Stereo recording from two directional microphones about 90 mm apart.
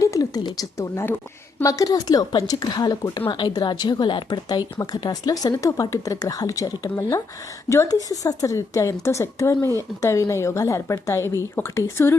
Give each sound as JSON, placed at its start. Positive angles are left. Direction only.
{"t": 0.0, "sound": "a woman's voice", "side_deg": 40}